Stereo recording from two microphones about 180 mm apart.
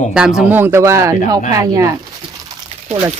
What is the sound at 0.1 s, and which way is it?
Speech, 5° right (ahead or behind).